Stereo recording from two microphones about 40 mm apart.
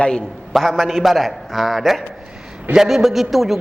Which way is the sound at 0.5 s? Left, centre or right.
Centre.